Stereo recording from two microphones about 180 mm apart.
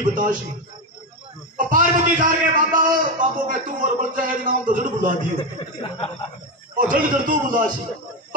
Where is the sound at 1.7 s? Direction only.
50° right (ahead or behind).